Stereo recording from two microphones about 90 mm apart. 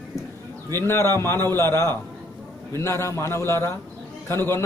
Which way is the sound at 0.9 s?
30° left (ahead or behind).